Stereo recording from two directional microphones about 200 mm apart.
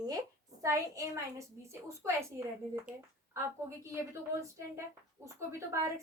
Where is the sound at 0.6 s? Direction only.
15° right (ahead or behind).